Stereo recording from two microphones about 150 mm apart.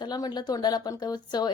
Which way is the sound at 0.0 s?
30° left (ahead or behind).